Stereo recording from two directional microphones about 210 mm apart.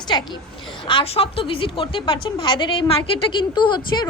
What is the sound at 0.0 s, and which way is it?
A woman's voice, 20° left (ahead or behind).